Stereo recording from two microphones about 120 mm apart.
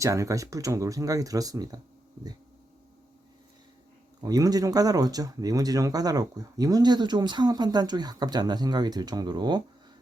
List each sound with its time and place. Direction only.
0.0 s speech: 25° right (ahead or behind)
4.2 s speech: 30° right (ahead or behind)